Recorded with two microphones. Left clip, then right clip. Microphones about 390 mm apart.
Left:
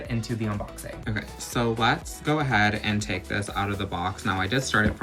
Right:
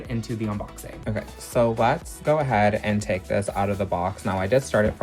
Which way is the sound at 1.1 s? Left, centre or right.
Centre.